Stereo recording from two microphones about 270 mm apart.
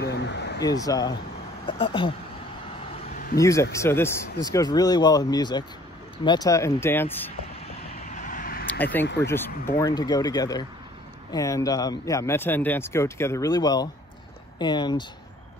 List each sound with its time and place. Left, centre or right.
0.0 s a sound: left
0.6 s speech: centre
3.3 s speech: centre
8.1 s vehicle: left
8.7 s speech: centre